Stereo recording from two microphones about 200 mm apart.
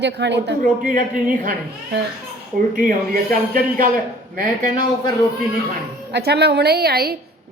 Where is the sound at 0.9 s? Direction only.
40° right (ahead or behind).